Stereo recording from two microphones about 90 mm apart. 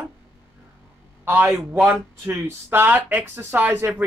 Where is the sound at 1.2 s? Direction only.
20° right (ahead or behind).